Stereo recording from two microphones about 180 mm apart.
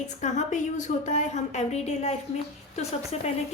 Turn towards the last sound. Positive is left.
turn(degrees=35)  # may be behind; listen again after turning